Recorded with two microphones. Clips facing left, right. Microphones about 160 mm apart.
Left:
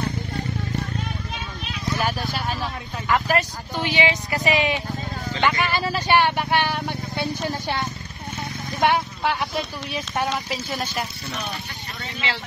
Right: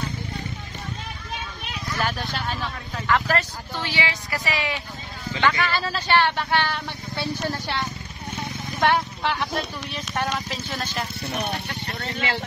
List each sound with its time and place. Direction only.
2.0 s vehicle: 10° left (ahead or behind)
3.1 s a sound: 10° left (ahead or behind)
5.4 s speech: 15° left (ahead or behind)
11.3 s speech: 60° right (ahead or behind)